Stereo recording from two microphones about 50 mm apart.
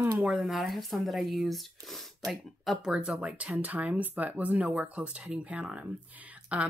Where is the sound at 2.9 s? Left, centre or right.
Centre.